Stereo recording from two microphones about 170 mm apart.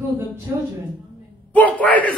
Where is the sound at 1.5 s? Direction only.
10° left (ahead or behind).